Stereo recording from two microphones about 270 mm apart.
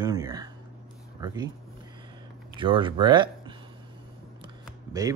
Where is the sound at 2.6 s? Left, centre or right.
Centre.